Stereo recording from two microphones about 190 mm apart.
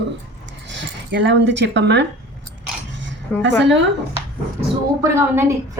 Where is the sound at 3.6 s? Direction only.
70° right (ahead or behind).